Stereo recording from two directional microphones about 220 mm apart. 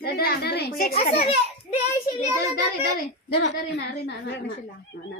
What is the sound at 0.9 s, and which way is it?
Speech, 30° left (ahead or behind).